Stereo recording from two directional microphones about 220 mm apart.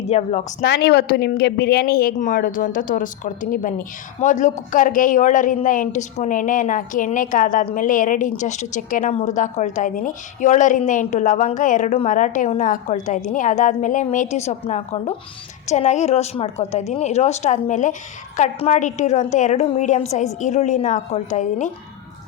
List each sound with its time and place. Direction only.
0.0 s speech: 30° left (ahead or behind)
0.6 s speech: 50° left (ahead or behind); by 21.7 s 35° left (ahead or behind)